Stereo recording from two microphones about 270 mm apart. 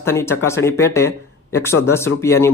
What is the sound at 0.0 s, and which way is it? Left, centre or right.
A man's voice, centre.